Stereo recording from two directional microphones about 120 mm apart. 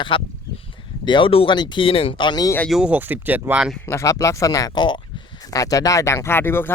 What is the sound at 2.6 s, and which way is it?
Speech, 5° right (ahead or behind).